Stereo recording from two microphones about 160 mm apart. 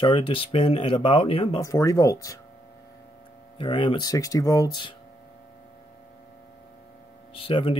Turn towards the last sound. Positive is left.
turn(degrees=35)  # may be behind; listen again after turning